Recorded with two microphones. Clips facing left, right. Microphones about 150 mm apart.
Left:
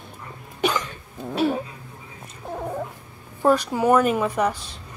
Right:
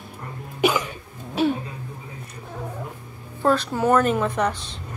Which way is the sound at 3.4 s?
15° left (ahead or behind).